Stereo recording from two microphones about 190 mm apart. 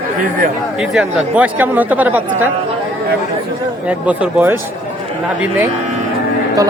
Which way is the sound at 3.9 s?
5° right (ahead or behind).